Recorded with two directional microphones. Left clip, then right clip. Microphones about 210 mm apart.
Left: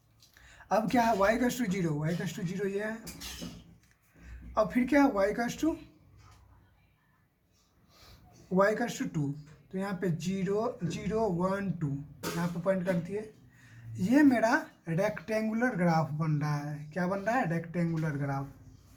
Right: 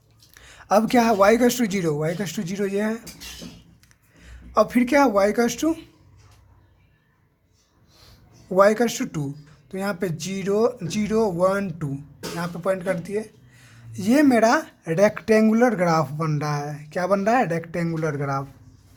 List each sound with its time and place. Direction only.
0.3 s speech: 55° right (ahead or behind)
4.5 s speech: 55° right (ahead or behind)
8.5 s speech: 55° right (ahead or behind)